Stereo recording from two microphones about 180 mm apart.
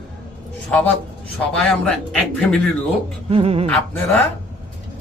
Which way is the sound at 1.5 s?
5° left (ahead or behind).